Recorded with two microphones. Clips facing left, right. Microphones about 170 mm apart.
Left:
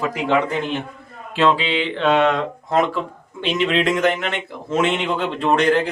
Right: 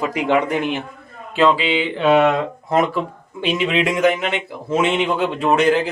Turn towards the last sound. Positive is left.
turn(degrees=-5)  # may be behind; listen again after turning